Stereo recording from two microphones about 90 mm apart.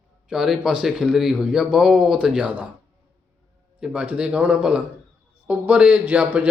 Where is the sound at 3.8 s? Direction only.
10° right (ahead or behind).